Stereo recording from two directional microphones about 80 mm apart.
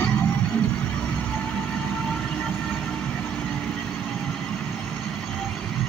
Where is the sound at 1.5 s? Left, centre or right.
Centre.